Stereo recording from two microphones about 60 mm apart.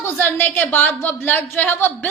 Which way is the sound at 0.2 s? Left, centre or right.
Left.